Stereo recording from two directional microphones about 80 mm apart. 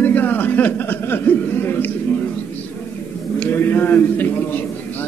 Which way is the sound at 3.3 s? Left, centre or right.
Left.